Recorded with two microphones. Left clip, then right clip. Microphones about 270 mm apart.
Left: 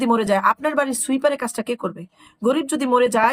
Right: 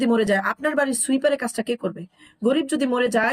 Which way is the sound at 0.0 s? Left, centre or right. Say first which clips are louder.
Left 3 dB; centre.